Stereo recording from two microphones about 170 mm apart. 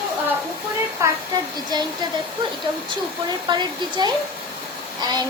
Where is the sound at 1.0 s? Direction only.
20° right (ahead or behind).